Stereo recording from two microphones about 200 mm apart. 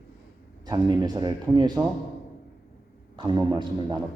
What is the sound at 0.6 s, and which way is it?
A man's voice, 20° right (ahead or behind).